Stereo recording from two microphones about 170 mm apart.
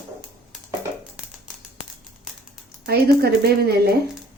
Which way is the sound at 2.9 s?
70° right (ahead or behind).